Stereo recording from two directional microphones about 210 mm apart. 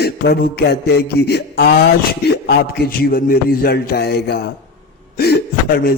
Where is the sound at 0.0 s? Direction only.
50° left (ahead or behind).